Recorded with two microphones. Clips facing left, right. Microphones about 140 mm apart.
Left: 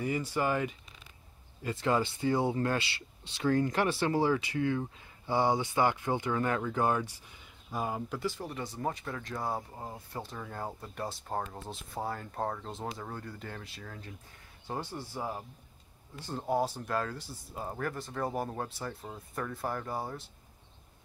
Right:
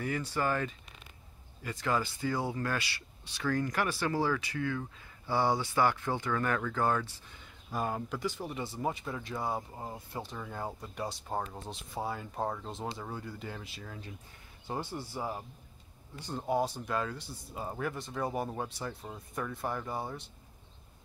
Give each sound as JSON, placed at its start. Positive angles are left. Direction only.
{"t": 0.0, "sound": "speech", "side_deg": 10}
{"t": 1.6, "sound": "speech", "side_deg": 25}
{"t": 7.7, "sound": "speech", "side_deg": 5}
{"t": 8.5, "sound": "speech", "side_deg": -10}